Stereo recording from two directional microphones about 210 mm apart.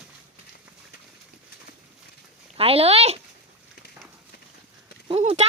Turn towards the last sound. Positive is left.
turn(degrees=-30)  # may be behind; listen again after turning